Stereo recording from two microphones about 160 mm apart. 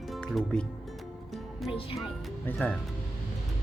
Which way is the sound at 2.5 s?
10° left (ahead or behind).